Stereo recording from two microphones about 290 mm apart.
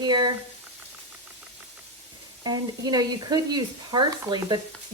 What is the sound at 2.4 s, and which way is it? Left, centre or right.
Speech, centre.